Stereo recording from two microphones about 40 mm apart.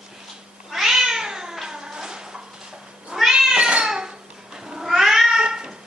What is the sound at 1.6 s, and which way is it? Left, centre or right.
Music, centre.